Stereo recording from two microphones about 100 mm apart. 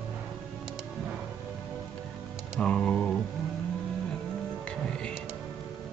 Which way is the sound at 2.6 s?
10° left (ahead or behind).